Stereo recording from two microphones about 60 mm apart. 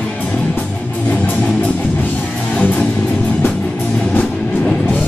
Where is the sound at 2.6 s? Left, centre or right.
Centre.